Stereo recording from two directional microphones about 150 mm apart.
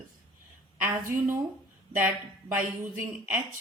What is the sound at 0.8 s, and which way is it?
Speech, 15° right (ahead or behind).